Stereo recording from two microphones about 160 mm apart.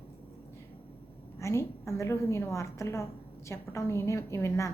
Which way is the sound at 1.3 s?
20° left (ahead or behind).